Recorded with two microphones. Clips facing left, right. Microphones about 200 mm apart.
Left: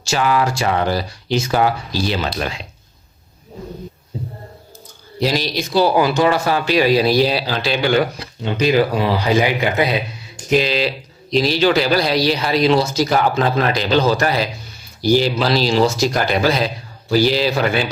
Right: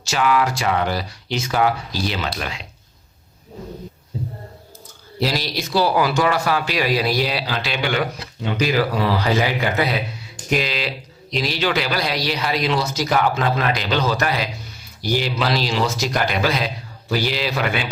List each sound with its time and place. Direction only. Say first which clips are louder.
0.1 s speech: left 1 dB; 35° left (ahead or behind)
5.3 s speech: left 5 dB; 20° left (ahead or behind); by 8.0 s 35° left (ahead or behind)
8.8 s speech: left 3 dB; 15° left (ahead or behind)
10.6 s speech: left 6 dB; 30° left (ahead or behind)